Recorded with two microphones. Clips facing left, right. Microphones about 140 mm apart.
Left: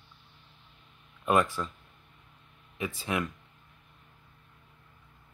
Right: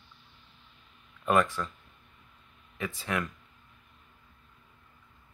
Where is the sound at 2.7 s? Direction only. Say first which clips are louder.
Left 1 dB; 15° left (ahead or behind).